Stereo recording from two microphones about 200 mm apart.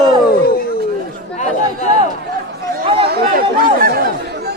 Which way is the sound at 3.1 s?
45° right (ahead or behind).